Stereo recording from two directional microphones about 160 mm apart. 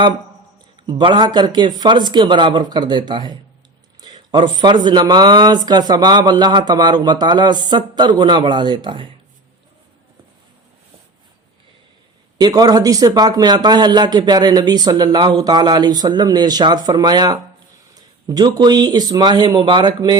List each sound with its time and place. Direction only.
0.8 s a man's voice: 30° right (ahead or behind)
12.4 s a man's voice: 25° right (ahead or behind)